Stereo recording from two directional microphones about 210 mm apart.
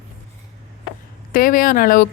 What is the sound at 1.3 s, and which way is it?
Speech, 40° left (ahead or behind).